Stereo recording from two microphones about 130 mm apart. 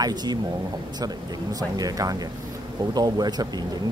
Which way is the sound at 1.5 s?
30° right (ahead or behind).